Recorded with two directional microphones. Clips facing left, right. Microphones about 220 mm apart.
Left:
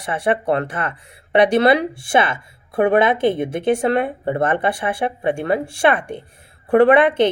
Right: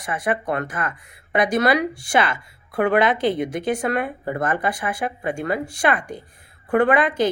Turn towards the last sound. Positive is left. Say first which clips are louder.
# left 5 dB
turn(degrees=30)  # may be behind; listen again after turning